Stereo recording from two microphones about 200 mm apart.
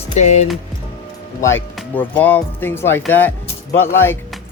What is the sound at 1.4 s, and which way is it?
Speech, 10° left (ahead or behind).